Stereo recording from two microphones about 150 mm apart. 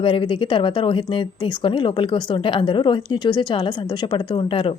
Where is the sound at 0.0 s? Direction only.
35° left (ahead or behind).